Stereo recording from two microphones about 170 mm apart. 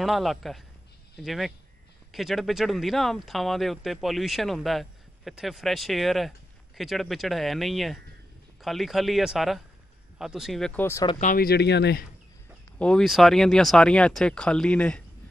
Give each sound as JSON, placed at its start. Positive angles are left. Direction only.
{"t": 0.0, "sound": "speech", "side_deg": 0}
{"t": 11.1, "sound": "speech", "side_deg": 55}
{"t": 12.7, "sound": "speech", "side_deg": 5}